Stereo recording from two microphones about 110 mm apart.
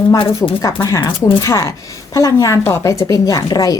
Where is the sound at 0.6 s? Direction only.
30° left (ahead or behind).